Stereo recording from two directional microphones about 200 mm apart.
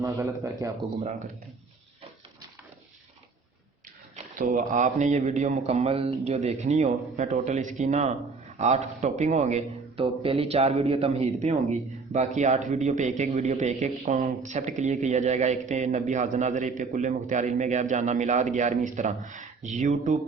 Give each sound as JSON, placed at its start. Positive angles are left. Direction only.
{"t": 0.0, "sound": "a man's voice", "side_deg": -15}
{"t": 4.4, "sound": "a man's voice", "side_deg": -40}